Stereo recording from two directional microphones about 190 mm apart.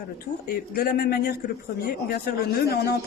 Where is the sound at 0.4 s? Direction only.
50° left (ahead or behind).